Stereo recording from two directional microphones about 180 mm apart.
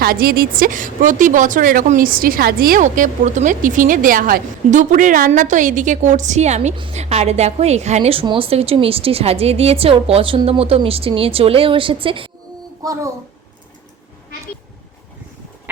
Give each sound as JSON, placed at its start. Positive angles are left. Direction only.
{"t": 0.0, "sound": "a woman's voice", "side_deg": -55}